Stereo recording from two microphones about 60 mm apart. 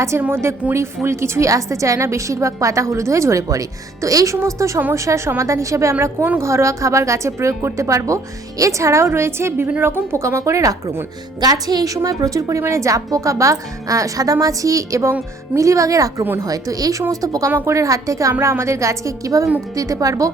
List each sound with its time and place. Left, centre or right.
0.1 s a woman's voice: right
0.6 s a woman's voice: centre
1.0 s a woman's voice: right
4.4 s a woman's voice: right
11.4 s a woman's voice: right
18.3 s a woman's voice: right
19.7 s a woman's voice: right